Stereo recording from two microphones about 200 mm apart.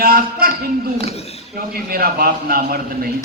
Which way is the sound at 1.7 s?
50° right (ahead or behind).